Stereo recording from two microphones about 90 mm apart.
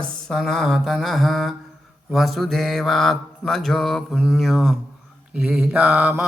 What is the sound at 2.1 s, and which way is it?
Mantra, centre (ahead or behind).